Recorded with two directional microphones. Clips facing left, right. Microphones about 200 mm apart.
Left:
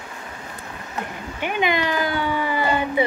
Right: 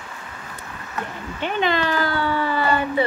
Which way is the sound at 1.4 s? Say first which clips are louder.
Even; 15° left (ahead or behind).